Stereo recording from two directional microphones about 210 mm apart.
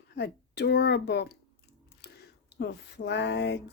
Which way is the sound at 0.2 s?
55° left (ahead or behind).